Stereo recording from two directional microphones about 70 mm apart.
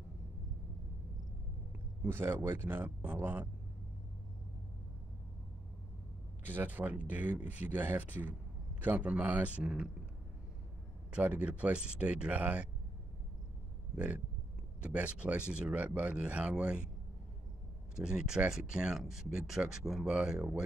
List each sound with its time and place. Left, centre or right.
2.0 s speech: right
6.4 s speech: right
11.1 s speech: centre
13.9 s speech: centre
17.9 s speech: centre